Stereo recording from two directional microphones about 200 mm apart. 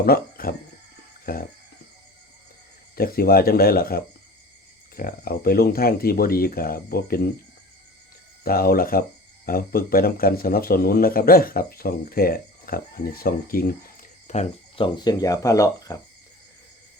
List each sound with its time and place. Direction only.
0.0 s speech: 50° left (ahead or behind)
1.2 s music: 45° left (ahead or behind)
2.9 s a man's voice: 50° left (ahead or behind)
8.4 s a man's voice: 50° left (ahead or behind)
14.3 s cricket: 35° left (ahead or behind)
14.8 s speech: 20° left (ahead or behind)